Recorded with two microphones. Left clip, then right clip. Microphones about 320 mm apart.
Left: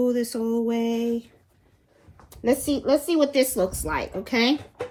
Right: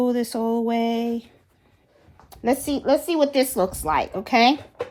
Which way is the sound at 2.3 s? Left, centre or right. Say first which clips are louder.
Even; right.